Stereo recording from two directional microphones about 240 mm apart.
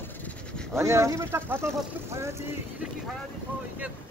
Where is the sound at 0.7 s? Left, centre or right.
Centre.